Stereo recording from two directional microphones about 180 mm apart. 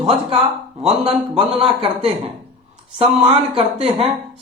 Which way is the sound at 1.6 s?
30° right (ahead or behind).